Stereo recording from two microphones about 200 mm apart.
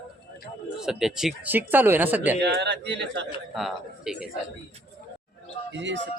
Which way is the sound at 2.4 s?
60° right (ahead or behind).